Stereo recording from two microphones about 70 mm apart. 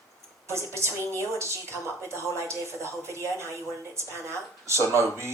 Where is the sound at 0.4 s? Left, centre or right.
Right.